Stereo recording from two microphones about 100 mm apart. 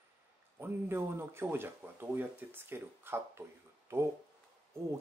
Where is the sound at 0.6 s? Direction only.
25° right (ahead or behind).